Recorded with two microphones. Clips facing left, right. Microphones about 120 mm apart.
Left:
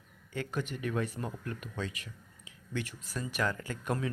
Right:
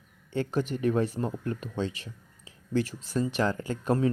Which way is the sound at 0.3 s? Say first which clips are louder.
Right 7 dB; 30° right (ahead or behind).